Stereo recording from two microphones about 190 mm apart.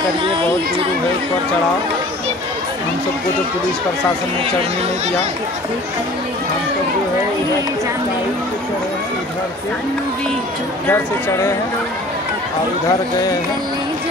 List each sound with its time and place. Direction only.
0.2 s speech: 30° right (ahead or behind)
10.9 s speech: 15° left (ahead or behind)